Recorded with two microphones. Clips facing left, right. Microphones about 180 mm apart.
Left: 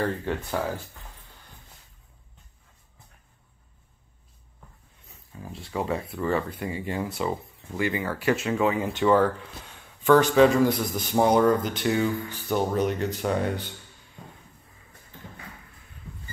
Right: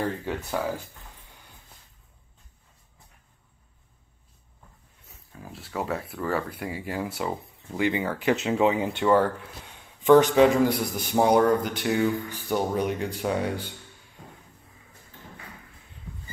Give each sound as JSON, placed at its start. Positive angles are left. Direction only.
{"t": 0.0, "sound": "a man's voice", "side_deg": -10}
{"t": 5.3, "sound": "a man's voice", "side_deg": -5}
{"t": 10.0, "sound": "a man's voice", "side_deg": -15}